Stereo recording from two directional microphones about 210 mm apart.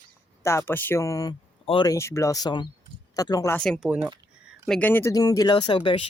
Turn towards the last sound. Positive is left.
turn(degrees=25)  # may be behind; listen again after turning